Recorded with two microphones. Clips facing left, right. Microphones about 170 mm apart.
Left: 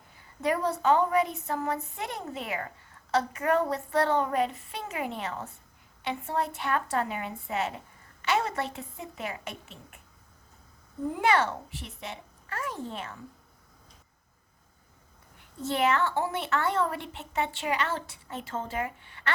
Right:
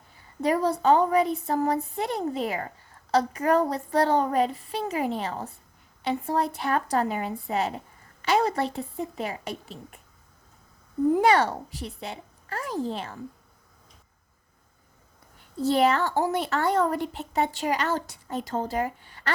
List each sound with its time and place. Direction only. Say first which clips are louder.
0.4 s a woman's voice: right 4 dB; 35° right (ahead or behind)
11.1 s a child's voice: right 4 dB; 35° right (ahead or behind)
15.5 s a woman's voice: right 5 dB; 35° right (ahead or behind)